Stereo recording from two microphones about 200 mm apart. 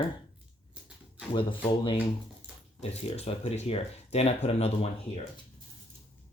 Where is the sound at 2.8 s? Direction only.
30° left (ahead or behind).